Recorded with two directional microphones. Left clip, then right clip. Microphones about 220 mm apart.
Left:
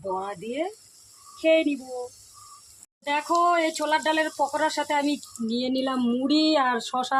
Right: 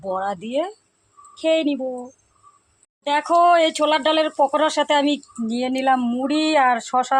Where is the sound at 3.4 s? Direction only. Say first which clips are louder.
Right 9 dB; 35° right (ahead or behind).